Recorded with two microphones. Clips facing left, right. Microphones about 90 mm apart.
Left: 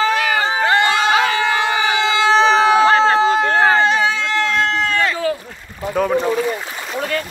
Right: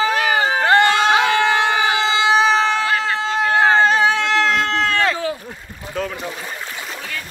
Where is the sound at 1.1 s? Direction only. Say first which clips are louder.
Even; 25° right (ahead or behind).